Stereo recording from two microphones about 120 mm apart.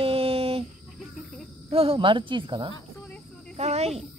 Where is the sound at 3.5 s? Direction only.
60° right (ahead or behind).